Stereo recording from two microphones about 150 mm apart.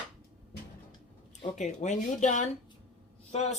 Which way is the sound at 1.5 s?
55° left (ahead or behind).